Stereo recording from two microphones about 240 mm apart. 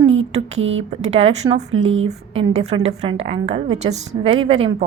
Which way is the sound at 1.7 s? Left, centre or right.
Right.